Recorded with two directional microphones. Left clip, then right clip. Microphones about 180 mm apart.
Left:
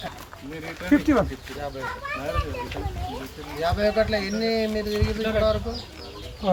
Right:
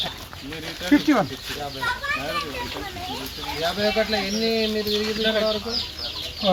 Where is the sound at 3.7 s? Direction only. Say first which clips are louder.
Even; 10° left (ahead or behind).